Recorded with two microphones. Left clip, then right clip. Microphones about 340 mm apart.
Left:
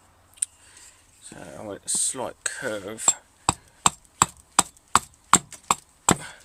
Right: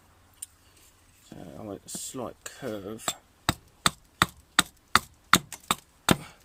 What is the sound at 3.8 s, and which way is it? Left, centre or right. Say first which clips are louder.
Chopping: left 2 dB; centre.